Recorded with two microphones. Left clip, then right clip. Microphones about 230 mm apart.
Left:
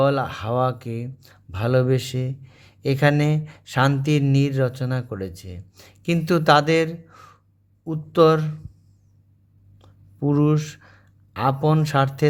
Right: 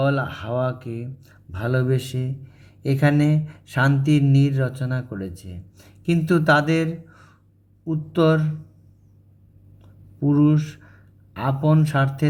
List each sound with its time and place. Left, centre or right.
0.0 s speech: left
10.2 s speech: left